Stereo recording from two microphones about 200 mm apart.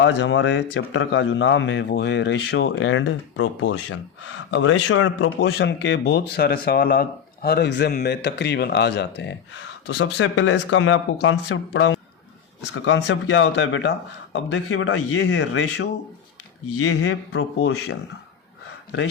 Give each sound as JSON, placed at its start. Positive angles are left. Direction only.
{"t": 0.0, "sound": "speech", "side_deg": 65}
{"t": 16.7, "sound": "speech", "side_deg": 90}